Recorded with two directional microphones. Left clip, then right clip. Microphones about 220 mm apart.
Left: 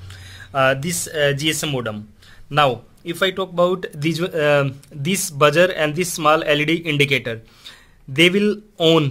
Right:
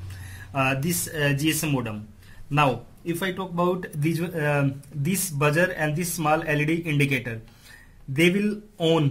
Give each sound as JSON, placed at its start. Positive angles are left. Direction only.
{"t": 0.5, "sound": "speech", "side_deg": 45}
{"t": 3.2, "sound": "speech", "side_deg": 50}